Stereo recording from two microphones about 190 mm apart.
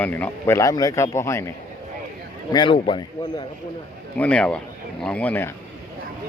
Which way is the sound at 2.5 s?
25° left (ahead or behind).